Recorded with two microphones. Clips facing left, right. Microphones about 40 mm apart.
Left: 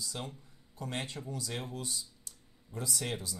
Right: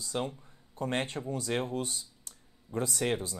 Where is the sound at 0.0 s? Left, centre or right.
Right.